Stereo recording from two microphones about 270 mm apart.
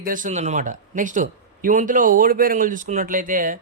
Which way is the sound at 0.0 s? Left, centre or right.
Right.